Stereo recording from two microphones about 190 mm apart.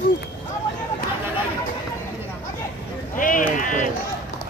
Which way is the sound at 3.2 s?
45° left (ahead or behind).